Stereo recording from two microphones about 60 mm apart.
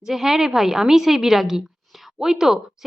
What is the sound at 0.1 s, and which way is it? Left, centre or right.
A woman's voice, centre.